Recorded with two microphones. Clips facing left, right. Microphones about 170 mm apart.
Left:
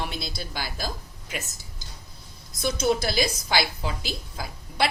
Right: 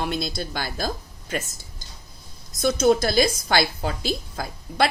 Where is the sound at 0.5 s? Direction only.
55° right (ahead or behind).